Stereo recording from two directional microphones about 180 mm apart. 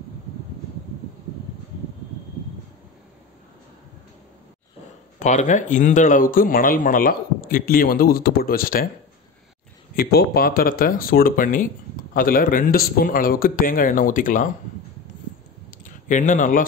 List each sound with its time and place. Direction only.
5.2 s speech: 40° left (ahead or behind)
9.9 s speech: 55° left (ahead or behind)
15.8 s speech: 45° left (ahead or behind)